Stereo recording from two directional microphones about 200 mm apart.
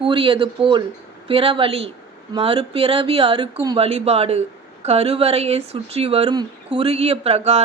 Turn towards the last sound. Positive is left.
turn(degrees=-30)  # may be behind; listen again after turning